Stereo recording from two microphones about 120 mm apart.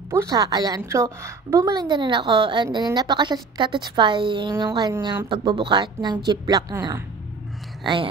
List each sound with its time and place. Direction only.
0.1 s a woman's voice: 30° right (ahead or behind)
7.8 s speech: 40° right (ahead or behind)